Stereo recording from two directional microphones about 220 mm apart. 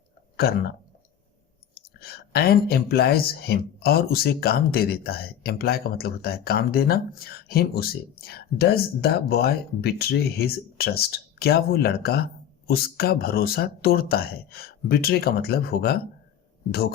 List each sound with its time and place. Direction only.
0.3 s speech: 45° left (ahead or behind)
1.7 s speech: 45° left (ahead or behind)